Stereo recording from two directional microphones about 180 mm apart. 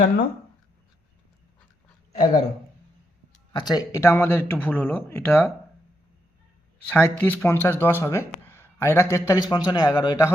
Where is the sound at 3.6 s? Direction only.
20° left (ahead or behind).